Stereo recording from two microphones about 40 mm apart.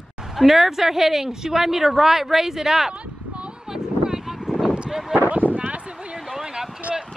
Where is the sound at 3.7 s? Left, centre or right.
Centre.